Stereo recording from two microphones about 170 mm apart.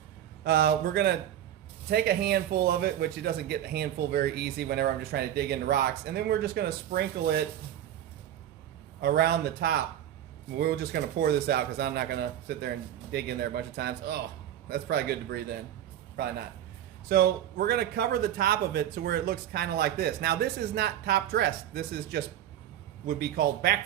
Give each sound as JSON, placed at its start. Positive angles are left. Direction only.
{"t": 0.4, "sound": "speech", "side_deg": -65}
{"t": 9.0, "sound": "speech", "side_deg": -70}
{"t": 17.1, "sound": "a man's voice", "side_deg": -65}